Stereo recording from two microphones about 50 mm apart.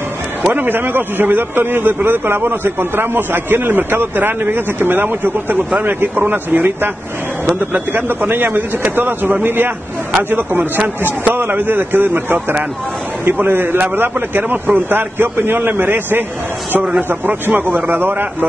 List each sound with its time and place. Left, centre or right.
0.5 s a man's voice: right
7.9 s a man's voice: right
10.3 s a man's voice: right